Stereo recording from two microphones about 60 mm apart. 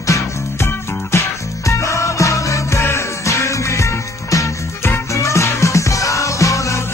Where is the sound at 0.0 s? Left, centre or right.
Left.